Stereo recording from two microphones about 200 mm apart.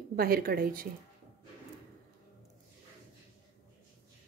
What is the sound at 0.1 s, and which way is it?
Speech, 50° right (ahead or behind).